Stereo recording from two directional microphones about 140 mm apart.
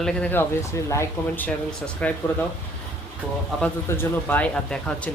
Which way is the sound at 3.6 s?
15° left (ahead or behind).